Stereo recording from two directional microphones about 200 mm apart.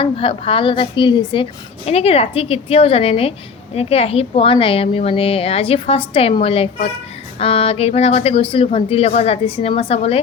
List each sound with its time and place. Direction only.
0.0 s a woman's voice: 25° left (ahead or behind)